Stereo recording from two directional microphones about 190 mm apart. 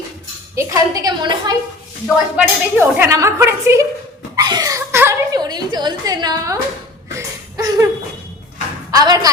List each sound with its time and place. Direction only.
0.5 s a woman's voice: 15° right (ahead or behind)
4.4 s a sound: 20° right (ahead or behind)
8.9 s a woman's voice: 20° right (ahead or behind)